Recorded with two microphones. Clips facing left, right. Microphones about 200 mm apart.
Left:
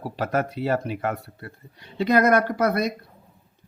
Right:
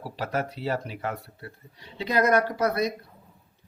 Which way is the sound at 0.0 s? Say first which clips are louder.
Left 4 dB; 50° left (ahead or behind).